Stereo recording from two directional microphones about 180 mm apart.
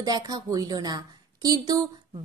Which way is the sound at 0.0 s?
20° right (ahead or behind).